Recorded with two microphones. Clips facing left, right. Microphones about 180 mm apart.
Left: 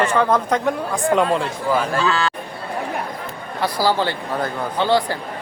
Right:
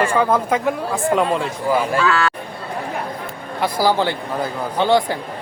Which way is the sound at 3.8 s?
15° right (ahead or behind).